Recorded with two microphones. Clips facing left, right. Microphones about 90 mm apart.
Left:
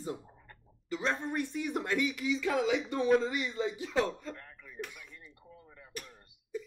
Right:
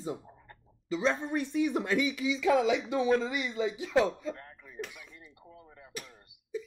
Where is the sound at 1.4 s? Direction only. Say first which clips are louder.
Right 5 dB; 90° right.